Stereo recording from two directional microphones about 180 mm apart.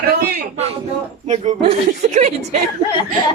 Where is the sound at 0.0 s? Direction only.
60° right (ahead or behind).